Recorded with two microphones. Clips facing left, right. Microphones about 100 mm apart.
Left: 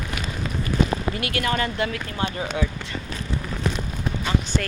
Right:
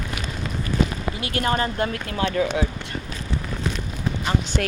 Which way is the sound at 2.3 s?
70° right (ahead or behind).